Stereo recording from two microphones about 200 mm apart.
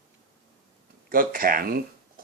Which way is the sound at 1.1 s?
45° right (ahead or behind).